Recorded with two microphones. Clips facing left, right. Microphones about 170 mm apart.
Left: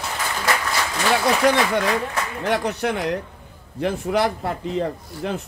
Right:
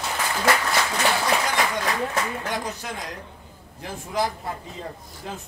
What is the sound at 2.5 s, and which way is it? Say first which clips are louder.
A man's voice: left 8 dB; 70° left (ahead or behind).